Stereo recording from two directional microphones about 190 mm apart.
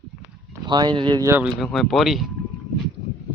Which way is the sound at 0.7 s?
25° right (ahead or behind).